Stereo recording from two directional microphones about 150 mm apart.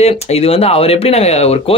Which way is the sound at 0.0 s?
45° left (ahead or behind).